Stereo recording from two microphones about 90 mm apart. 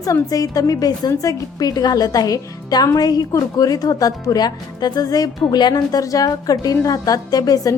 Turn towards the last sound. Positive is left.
turn(degrees=40)  # may be behind; listen again after turning